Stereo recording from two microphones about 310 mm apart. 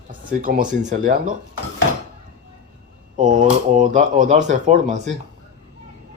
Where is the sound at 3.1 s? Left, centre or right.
Right.